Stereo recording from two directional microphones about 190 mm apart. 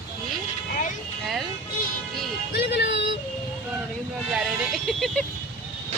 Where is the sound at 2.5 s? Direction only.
60° left (ahead or behind).